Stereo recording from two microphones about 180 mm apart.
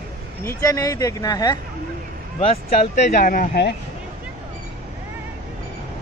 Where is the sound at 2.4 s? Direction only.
35° left (ahead or behind); by 3.8 s 65° left (ahead or behind).